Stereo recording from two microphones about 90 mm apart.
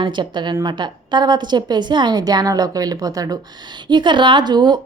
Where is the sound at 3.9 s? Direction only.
60° right (ahead or behind).